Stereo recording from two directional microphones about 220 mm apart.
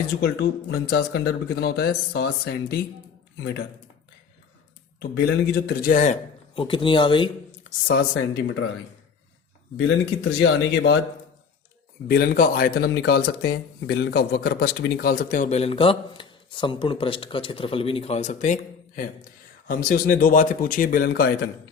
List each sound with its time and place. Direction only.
0.2 s speech: 45° left (ahead or behind)
4.9 s a man's voice: 45° left (ahead or behind); by 7.3 s 20° left (ahead or behind)
8.4 s speech: 50° left (ahead or behind)
9.7 s speech: 50° left (ahead or behind)
12.0 s speech: 45° left (ahead or behind)